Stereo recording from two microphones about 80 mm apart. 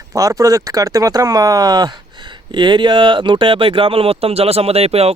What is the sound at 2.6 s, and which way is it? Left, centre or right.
Speech, right.